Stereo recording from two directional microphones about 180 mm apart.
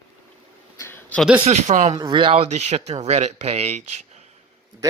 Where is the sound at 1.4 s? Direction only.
40° right (ahead or behind).